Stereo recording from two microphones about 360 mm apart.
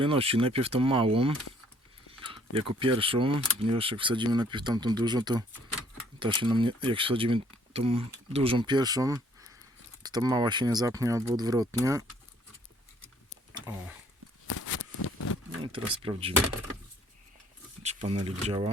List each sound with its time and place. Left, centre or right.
0.0 s speech: centre
14.4 s a sound: left
15.6 s speech: centre
17.8 s speech: centre